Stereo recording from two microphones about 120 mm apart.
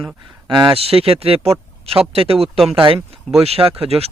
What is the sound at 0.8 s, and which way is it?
Speech, 55° right (ahead or behind).